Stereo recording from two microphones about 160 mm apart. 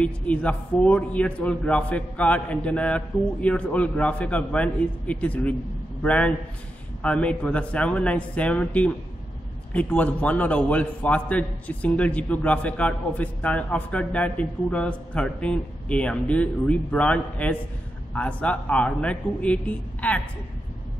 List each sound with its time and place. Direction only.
0.0 s a man's voice: 10° left (ahead or behind)